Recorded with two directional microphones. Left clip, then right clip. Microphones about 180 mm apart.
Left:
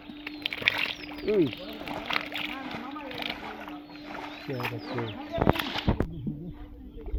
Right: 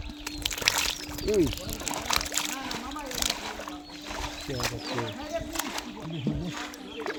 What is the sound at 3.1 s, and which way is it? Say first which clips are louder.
Splash: right 5 dB; 15° right (ahead or behind).